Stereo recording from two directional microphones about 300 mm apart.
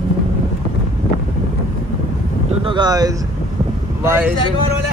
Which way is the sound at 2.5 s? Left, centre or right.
Centre.